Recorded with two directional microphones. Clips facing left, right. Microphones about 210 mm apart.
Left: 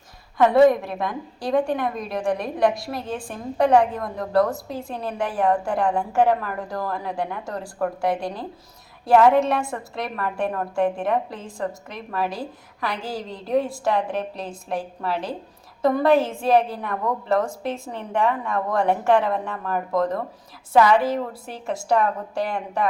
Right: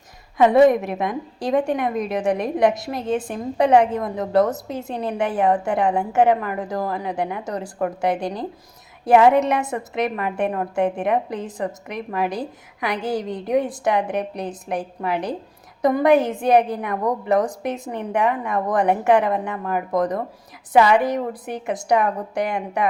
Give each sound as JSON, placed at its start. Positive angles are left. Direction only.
{"t": 0.3, "sound": "a woman's voice", "side_deg": -20}